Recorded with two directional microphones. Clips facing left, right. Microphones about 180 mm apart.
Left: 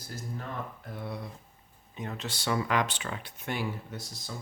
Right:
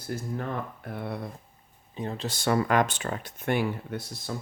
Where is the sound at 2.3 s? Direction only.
50° right (ahead or behind).